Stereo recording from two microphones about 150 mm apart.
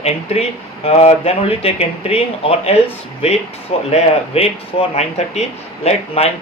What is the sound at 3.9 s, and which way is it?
Speech, 40° left (ahead or behind).